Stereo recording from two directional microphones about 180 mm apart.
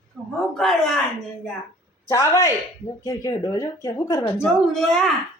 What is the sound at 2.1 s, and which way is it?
Speech, 20° left (ahead or behind).